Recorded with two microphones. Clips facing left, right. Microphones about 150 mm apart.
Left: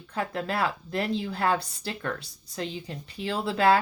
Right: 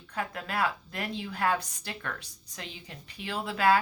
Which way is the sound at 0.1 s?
30° left (ahead or behind).